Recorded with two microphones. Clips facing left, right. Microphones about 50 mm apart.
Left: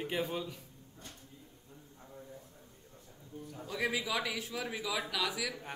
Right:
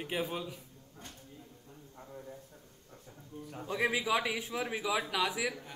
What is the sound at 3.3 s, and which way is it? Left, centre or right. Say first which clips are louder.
Speech: even; right.